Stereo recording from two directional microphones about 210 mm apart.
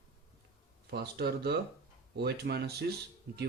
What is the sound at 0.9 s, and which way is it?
Speech, 50° right (ahead or behind).